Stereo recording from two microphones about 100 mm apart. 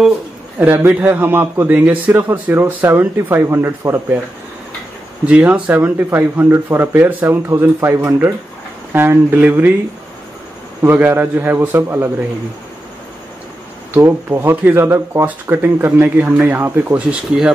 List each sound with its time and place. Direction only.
0.6 s speech: 20° right (ahead or behind)
5.2 s speech: 15° right (ahead or behind)
10.8 s speech: 20° right (ahead or behind)
13.9 s speech: 25° right (ahead or behind)